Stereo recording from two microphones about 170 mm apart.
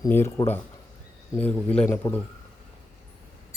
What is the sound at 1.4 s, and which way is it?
Speech, 10° left (ahead or behind).